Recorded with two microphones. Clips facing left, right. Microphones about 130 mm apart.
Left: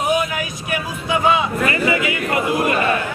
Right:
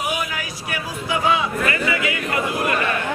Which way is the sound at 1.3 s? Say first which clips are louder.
Left 2 dB; 25° left (ahead or behind).